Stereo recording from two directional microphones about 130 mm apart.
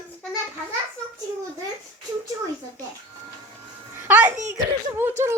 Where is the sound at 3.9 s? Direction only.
10° right (ahead or behind).